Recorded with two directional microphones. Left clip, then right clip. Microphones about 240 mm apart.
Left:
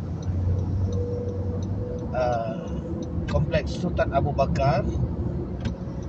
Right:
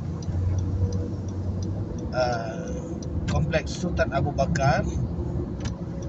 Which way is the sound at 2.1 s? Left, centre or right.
Centre.